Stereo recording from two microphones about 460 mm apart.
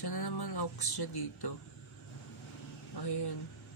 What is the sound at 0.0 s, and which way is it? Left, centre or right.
Speech, left.